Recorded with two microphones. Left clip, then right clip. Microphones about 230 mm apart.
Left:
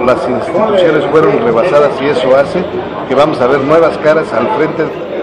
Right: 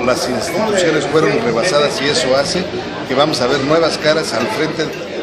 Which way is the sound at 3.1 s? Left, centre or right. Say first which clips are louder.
Left 5 dB; right.